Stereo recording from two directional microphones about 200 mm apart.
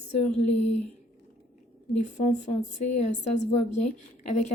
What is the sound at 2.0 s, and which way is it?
A woman's voice, 35° left (ahead or behind).